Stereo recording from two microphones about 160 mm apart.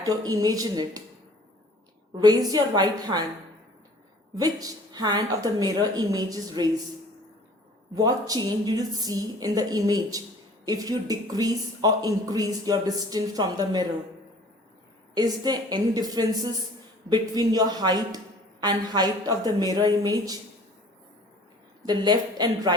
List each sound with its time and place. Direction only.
0.0 s speech: 25° right (ahead or behind)
2.1 s speech: 25° right (ahead or behind)
4.4 s speech: 25° right (ahead or behind)
7.9 s speech: 25° right (ahead or behind)
15.1 s speech: 25° right (ahead or behind)
21.8 s speech: 25° right (ahead or behind)